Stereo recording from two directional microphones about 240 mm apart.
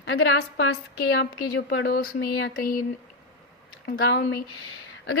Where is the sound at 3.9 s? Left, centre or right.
Left.